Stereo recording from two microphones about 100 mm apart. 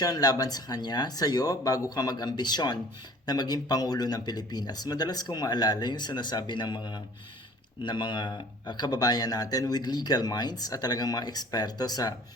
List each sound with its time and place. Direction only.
0.0 s speech: 40° left (ahead or behind)